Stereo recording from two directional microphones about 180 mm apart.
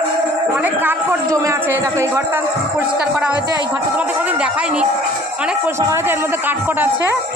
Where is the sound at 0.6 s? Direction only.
10° right (ahead or behind).